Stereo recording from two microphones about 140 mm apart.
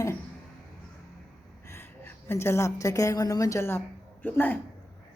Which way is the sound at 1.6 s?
15° left (ahead or behind).